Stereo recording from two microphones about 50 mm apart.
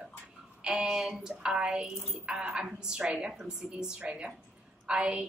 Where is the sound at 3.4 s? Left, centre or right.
Centre.